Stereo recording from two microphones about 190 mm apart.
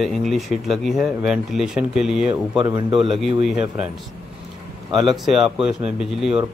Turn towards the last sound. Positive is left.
turn(degrees=0)  # may be behind; listen again after turning